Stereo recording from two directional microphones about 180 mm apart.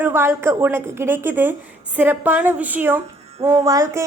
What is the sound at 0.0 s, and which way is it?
A woman's voice, 10° right (ahead or behind).